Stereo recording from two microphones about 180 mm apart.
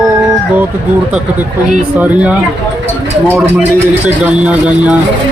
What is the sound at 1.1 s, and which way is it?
Speech, 5° right (ahead or behind).